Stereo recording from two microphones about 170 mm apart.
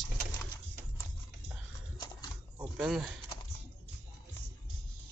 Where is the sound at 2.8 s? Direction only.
Centre (ahead or behind).